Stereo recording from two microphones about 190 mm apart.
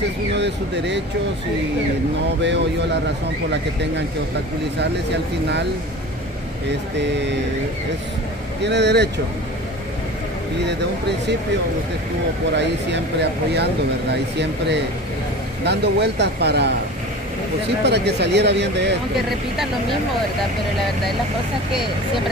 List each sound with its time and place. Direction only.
0.3 s speech: 65° right (ahead or behind)
2.4 s speech: 70° right (ahead or behind)
4.7 s speech: 65° right (ahead or behind)
7.0 s speech: 65° right (ahead or behind)
8.6 s speech: 65° right (ahead or behind)
10.6 s speech: 65° right (ahead or behind)
12.5 s speech: 65° right (ahead or behind)
15.6 s speech: 60° right (ahead or behind)
17.8 s speech: 65° right (ahead or behind)